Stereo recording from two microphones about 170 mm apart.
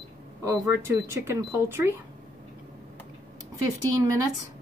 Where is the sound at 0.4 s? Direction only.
15° right (ahead or behind).